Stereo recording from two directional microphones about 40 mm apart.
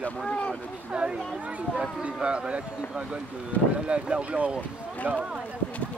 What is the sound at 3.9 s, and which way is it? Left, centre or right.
Speech, right.